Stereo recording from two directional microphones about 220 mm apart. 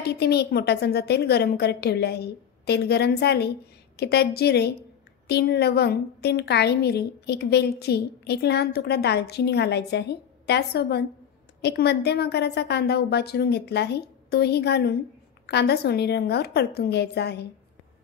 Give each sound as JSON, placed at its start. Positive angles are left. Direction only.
{"t": 0.0, "sound": "a woman's voice", "side_deg": 50}